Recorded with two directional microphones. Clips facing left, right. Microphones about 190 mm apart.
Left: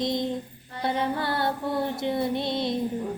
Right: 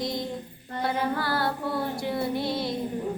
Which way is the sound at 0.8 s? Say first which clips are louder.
Left 1 dB; 25° left (ahead or behind).